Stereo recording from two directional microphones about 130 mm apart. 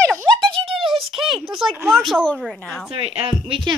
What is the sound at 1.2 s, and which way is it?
Speech, 5° right (ahead or behind).